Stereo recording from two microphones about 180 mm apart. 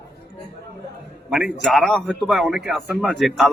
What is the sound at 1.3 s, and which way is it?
Speech, centre (ahead or behind).